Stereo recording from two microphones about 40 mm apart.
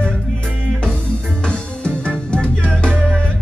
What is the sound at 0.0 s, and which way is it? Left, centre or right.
Music, left.